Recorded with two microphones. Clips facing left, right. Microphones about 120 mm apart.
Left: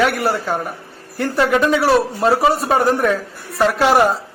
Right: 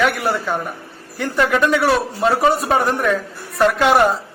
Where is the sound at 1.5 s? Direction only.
25° left (ahead or behind).